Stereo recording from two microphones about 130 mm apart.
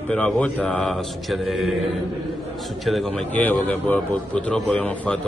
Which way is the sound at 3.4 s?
10° left (ahead or behind).